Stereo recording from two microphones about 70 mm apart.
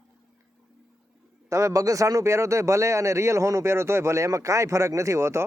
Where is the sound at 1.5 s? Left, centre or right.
Right.